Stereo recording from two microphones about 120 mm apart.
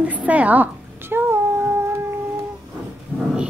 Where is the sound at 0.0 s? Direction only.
10° right (ahead or behind).